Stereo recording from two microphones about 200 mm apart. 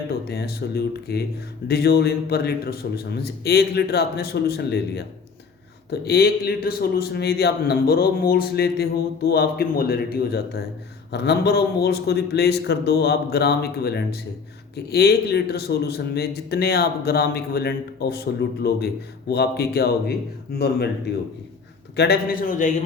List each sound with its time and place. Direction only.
0.1 s a man's voice: 50° left (ahead or behind)
21.9 s a man's voice: 55° left (ahead or behind)